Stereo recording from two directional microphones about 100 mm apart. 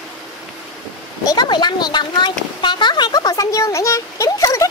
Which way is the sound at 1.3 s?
45° left (ahead or behind).